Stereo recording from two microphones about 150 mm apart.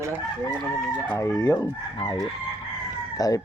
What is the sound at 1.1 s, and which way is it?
Speech, 20° left (ahead or behind).